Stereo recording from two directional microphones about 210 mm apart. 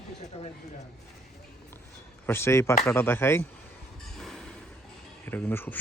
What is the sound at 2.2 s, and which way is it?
Speech, 10° left (ahead or behind).